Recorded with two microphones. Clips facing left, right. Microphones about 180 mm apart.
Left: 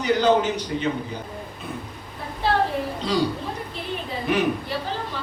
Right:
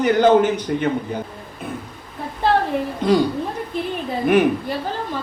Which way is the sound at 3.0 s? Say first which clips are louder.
Right 11 dB; 50° right (ahead or behind).